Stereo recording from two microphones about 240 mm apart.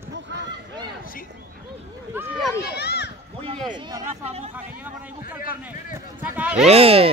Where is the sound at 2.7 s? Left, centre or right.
Left.